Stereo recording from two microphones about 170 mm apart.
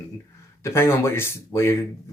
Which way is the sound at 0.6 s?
15° left (ahead or behind).